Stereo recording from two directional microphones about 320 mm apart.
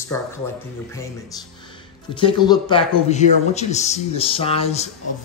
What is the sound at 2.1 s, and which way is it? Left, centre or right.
A man's voice, centre.